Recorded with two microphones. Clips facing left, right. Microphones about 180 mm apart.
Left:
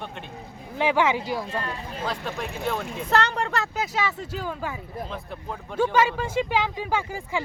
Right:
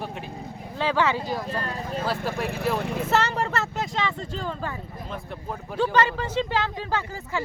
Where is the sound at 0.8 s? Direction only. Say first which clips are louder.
Left 2 dB; 15° left (ahead or behind).